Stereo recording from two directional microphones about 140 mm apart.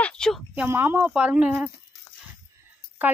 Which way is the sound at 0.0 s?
5° left (ahead or behind).